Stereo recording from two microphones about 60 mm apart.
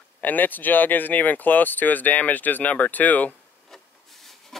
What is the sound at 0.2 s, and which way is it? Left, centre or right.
Speech, left.